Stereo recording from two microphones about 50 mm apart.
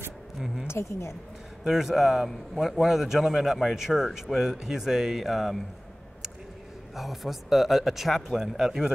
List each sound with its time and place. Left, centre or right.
0.7 s speech: left
1.6 s a man's voice: centre
7.0 s speech: centre